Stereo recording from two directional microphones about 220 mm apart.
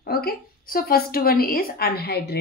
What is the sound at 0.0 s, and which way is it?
A woman's voice, 45° left (ahead or behind).